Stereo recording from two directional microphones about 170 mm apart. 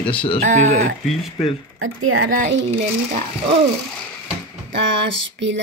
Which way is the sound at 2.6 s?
40° right (ahead or behind).